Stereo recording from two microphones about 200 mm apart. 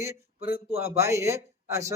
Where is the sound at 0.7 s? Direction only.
30° right (ahead or behind).